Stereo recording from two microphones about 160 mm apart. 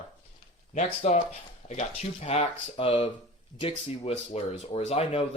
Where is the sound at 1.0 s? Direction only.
40° left (ahead or behind).